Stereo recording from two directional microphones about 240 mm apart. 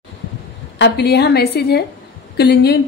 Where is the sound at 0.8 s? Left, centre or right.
Left.